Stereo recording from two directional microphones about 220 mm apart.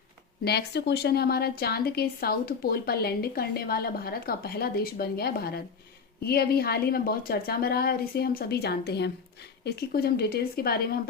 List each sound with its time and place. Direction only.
0.4 s speech: 50° left (ahead or behind)